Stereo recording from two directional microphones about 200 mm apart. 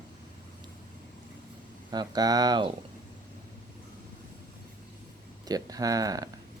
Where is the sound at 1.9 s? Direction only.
20° right (ahead or behind).